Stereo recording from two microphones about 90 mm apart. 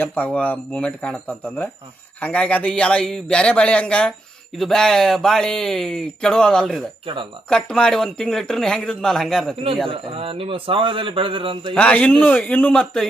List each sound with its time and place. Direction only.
0.0 s a man's voice: 20° left (ahead or behind); by 6.8 s 5° left (ahead or behind)
7.0 s speech: 70° right (ahead or behind)
7.5 s speech: 10° left (ahead or behind)
9.9 s speech: 90° right; by 11.7 s 70° right (ahead or behind)
11.7 s a man's voice: 15° left (ahead or behind)